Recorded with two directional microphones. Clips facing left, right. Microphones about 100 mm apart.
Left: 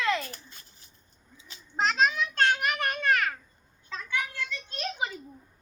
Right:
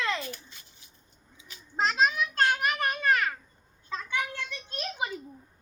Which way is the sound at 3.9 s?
20° right (ahead or behind).